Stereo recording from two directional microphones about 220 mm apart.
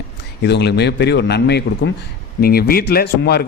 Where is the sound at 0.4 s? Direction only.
50° left (ahead or behind).